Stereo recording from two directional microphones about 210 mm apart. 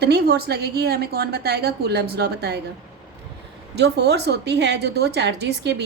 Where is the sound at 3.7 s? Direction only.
55° right (ahead or behind).